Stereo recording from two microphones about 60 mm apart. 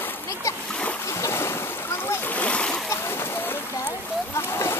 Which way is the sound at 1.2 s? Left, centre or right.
Left.